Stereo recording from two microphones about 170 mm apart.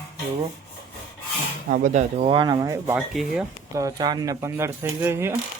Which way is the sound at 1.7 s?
50° right (ahead or behind).